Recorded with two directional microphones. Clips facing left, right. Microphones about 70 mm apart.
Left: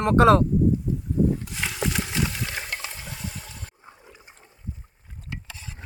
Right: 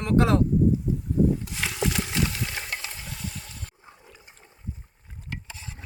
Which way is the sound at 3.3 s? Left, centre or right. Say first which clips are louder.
Left 1 dB; centre.